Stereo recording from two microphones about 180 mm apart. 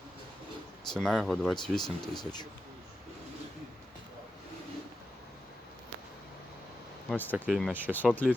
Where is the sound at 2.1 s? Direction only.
25° left (ahead or behind).